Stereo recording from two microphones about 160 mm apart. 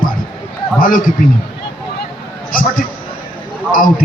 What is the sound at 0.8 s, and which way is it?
Speech, 60° left (ahead or behind).